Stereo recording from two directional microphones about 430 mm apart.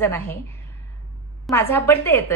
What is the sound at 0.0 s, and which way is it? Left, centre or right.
Speech, centre.